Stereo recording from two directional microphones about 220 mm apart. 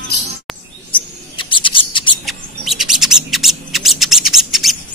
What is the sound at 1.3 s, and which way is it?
Scissors, 20° left (ahead or behind).